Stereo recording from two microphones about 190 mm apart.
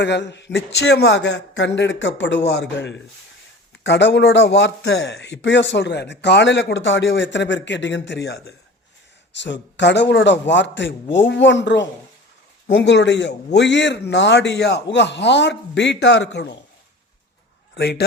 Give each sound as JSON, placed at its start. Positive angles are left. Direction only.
{"t": 0.0, "sound": "a man's voice", "side_deg": 65}
{"t": 17.7, "sound": "a man's voice", "side_deg": 60}